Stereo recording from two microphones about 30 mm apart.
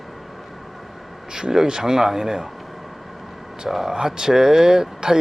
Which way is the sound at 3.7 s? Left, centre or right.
Centre.